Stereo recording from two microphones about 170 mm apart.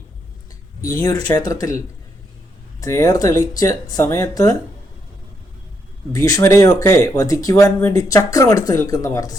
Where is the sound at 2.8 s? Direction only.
20° left (ahead or behind).